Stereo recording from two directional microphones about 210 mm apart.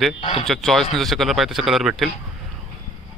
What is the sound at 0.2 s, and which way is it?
Speech, 30° left (ahead or behind).